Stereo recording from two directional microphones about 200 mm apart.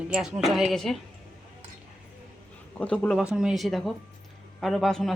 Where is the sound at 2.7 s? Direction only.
5° left (ahead or behind).